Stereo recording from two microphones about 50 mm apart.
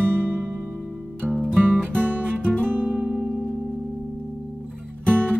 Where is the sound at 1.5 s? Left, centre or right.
Right.